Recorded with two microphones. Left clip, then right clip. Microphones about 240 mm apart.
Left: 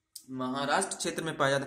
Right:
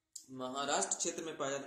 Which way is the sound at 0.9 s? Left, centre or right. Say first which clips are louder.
Left 5 dB; left.